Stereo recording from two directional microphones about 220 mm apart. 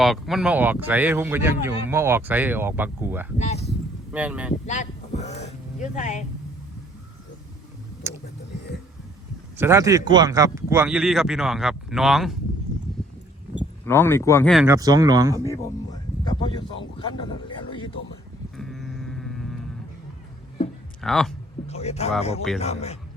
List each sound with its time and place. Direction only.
0.0 s speech: centre (ahead or behind)
3.3 s speech: 30° left (ahead or behind)
4.1 s speech: 5° right (ahead or behind)
4.6 s speech: 30° left (ahead or behind)
9.6 s speech: 10° right (ahead or behind)
13.8 s speech: 10° left (ahead or behind)
14.5 s speech: 5° right (ahead or behind)
14.8 s speech: 15° right (ahead or behind)
15.4 s speech: 15° left (ahead or behind)
18.5 s sheep: centre (ahead or behind)
21.0 s speech: centre (ahead or behind)
21.7 s speech: 30° left (ahead or behind)